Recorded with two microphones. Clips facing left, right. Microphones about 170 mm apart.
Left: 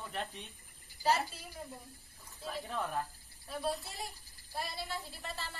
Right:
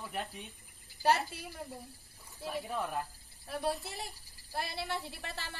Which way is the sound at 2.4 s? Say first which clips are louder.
Right 2 dB; 5° right (ahead or behind).